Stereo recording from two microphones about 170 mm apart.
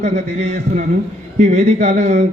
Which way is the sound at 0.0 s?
40° right (ahead or behind).